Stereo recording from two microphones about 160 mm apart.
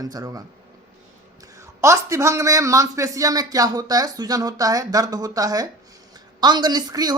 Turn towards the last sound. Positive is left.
turn(degrees=-25)  # may be behind; listen again after turning